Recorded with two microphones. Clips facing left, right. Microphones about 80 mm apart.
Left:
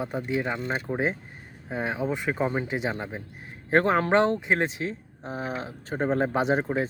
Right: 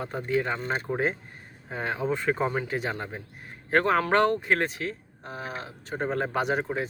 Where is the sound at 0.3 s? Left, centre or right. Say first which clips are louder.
Right 3 dB; centre.